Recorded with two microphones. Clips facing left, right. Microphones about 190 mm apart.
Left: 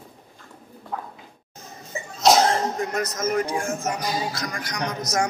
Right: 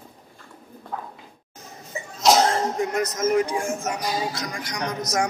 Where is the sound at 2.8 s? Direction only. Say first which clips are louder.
Right 2 dB; 10° right (ahead or behind).